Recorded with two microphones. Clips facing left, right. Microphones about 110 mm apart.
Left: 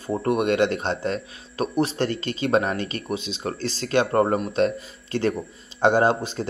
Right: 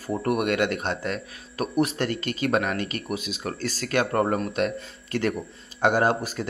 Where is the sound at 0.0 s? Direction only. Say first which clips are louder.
Left 2 dB; 25° left (ahead or behind).